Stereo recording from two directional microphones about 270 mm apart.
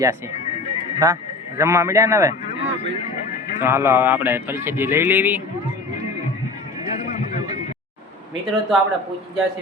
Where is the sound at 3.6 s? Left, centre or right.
Centre.